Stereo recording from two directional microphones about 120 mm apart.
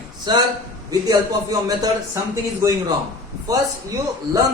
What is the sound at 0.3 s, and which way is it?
A man's voice, 40° right (ahead or behind).